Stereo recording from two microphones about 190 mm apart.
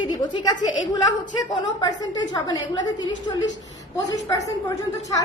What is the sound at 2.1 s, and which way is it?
Speech, 20° left (ahead or behind).